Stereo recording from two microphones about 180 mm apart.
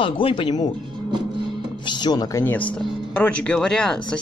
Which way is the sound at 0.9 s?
25° right (ahead or behind).